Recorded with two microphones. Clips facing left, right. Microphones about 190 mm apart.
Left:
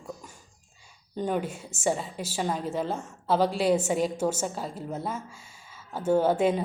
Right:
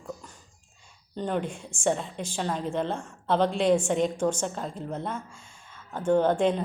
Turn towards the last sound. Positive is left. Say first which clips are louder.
# even
turn(degrees=5)  # may be behind; listen again after turning